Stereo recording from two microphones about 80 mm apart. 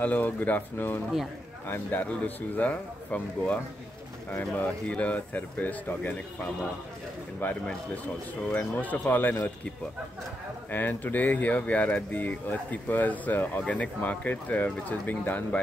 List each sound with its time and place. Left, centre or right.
0.0 s speech: left
10.7 s speech: left